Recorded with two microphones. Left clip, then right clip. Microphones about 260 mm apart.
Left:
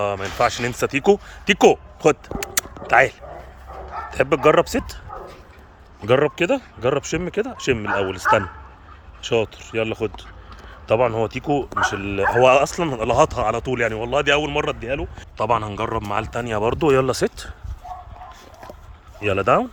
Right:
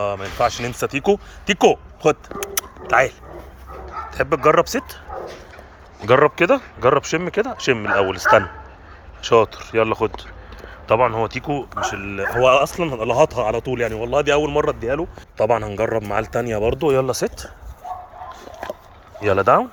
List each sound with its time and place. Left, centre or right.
0.0 s speech: centre
6.1 s speech: centre
15.4 s a man's voice: left
16.1 s speech: centre
19.2 s speech: centre